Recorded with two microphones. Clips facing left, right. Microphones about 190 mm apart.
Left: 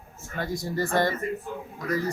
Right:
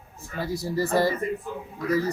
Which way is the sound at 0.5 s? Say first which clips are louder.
Right 3 dB; 35° right (ahead or behind).